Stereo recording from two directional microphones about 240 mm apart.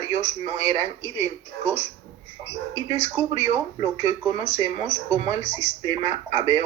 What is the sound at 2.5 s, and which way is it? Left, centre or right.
Speech, centre.